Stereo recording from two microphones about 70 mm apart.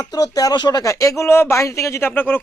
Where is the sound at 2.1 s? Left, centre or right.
Left.